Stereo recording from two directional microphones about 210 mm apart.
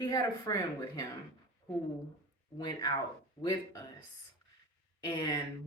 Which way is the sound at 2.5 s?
20° left (ahead or behind).